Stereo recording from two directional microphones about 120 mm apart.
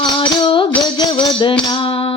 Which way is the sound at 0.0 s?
45° left (ahead or behind).